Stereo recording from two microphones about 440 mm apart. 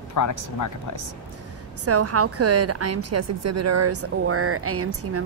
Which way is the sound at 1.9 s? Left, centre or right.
Right.